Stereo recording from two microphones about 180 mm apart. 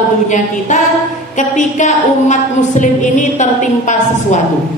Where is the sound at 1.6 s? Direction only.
45° left (ahead or behind).